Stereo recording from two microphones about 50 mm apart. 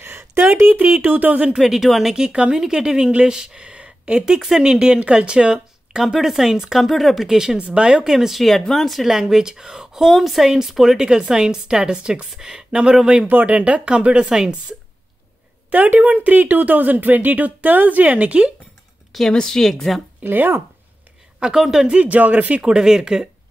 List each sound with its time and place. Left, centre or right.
0.0 s a sound: right
0.6 s speech: right
0.8 s speech: right
1.5 s a woman's voice: centre
7.3 s a woman's voice: centre
8.4 s a woman's voice: centre
11.1 s a woman's voice: centre
13.3 s speech: right
15.7 s speech: right
19.1 s a woman's voice: centre
20.2 s speech: right
21.4 s a woman's voice: centre
21.8 s speech: right